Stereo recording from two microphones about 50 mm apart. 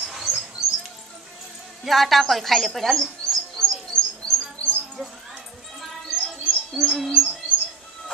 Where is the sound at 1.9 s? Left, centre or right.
Centre.